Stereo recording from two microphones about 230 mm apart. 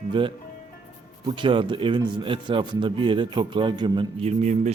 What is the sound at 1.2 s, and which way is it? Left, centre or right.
A man's voice, right.